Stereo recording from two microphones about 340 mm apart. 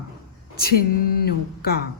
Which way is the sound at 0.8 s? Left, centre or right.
Left.